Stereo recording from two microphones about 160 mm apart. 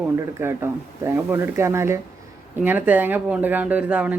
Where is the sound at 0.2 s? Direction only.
15° right (ahead or behind).